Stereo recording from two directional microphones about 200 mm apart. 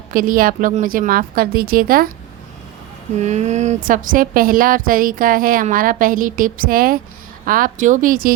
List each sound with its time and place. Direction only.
0.1 s speech: 45° right (ahead or behind)
3.2 s speech: 35° right (ahead or behind)